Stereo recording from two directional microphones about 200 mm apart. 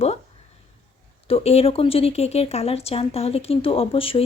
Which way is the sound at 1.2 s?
30° left (ahead or behind).